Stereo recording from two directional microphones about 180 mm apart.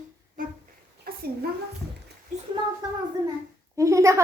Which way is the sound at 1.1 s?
55° right (ahead or behind).